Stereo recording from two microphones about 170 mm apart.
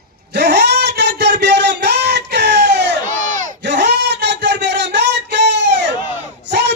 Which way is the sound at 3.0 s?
50° right (ahead or behind).